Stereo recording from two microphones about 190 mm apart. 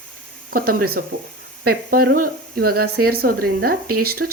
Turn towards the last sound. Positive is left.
turn(degrees=-50)  # may be behind; listen again after turning